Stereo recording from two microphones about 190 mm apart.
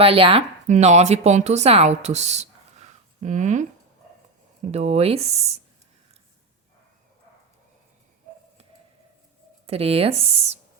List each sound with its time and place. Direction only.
0.0 s speech: 30° right (ahead or behind)
4.7 s speech: 35° right (ahead or behind)
9.6 s speech: 30° right (ahead or behind)